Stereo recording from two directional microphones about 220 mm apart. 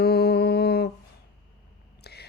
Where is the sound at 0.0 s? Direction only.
45° left (ahead or behind).